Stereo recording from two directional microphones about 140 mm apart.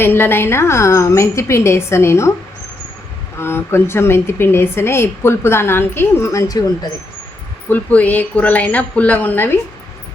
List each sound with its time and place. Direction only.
0.0 s a woman's voice: 15° left (ahead or behind)
3.3 s a woman's voice: 15° left (ahead or behind)
7.7 s a woman's voice: 10° left (ahead or behind)